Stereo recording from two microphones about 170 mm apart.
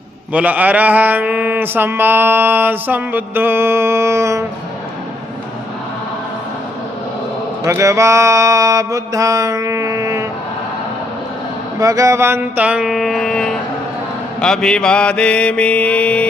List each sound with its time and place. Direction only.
0.3 s mantra: 10° right (ahead or behind)
7.6 s mantra: 20° right (ahead or behind)
11.8 s mantra: 20° right (ahead or behind); by 16.2 s 5° left (ahead or behind)